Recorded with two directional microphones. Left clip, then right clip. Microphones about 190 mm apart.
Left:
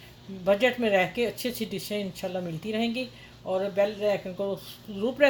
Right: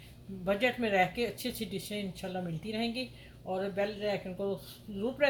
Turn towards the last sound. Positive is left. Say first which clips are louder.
# left 7 dB
turn(degrees=40)  # may be behind; listen again after turning